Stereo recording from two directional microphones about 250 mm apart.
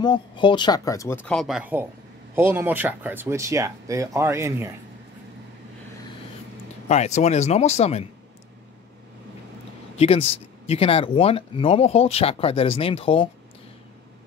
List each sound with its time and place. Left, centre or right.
0.0 s speech: centre
6.9 s speech: left
9.9 s speech: left